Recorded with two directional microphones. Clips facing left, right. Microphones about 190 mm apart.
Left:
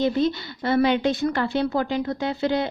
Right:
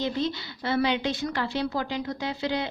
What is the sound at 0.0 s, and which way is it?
A woman's voice, 50° left (ahead or behind).